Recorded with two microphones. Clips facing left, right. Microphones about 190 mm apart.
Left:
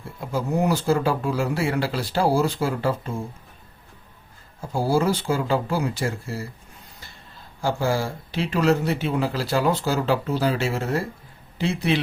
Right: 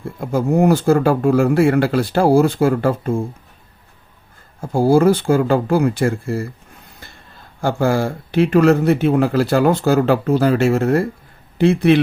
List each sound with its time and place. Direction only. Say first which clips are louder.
0.2 s speech: right 8 dB; 50° right (ahead or behind)
4.6 s speech: right 9 dB; 55° right (ahead or behind)
7.6 s speech: right 6 dB; 55° right (ahead or behind)